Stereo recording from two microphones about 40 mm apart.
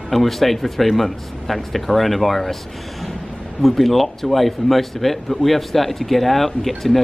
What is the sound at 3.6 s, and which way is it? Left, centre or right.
Speech, centre.